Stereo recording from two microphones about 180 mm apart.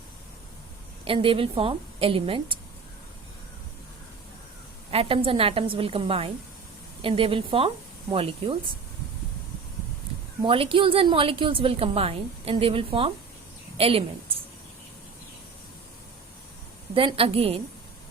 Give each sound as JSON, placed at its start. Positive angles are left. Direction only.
{"t": 1.0, "sound": "a woman's voice", "side_deg": -30}
{"t": 4.9, "sound": "a woman's voice", "side_deg": -30}
{"t": 10.4, "sound": "a woman's voice", "side_deg": -30}
{"t": 16.9, "sound": "a woman's voice", "side_deg": -30}